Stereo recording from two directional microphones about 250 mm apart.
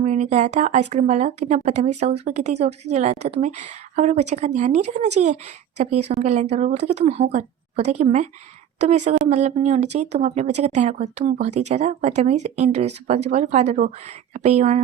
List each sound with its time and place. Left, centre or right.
0.0 s a woman's voice: right